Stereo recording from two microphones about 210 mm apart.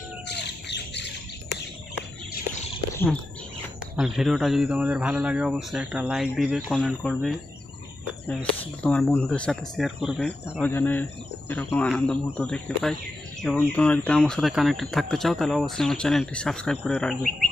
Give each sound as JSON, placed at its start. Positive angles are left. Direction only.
{"t": 0.3, "sound": "bird", "side_deg": 55}
{"t": 2.9, "sound": "bird", "side_deg": 10}
{"t": 3.9, "sound": "speech", "side_deg": 0}